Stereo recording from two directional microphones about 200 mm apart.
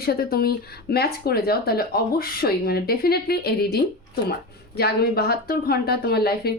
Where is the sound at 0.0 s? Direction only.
50° left (ahead or behind).